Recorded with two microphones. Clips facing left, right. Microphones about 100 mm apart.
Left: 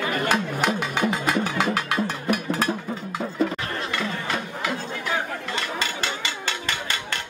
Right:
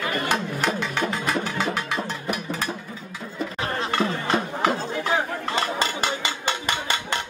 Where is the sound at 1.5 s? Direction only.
55° left (ahead or behind).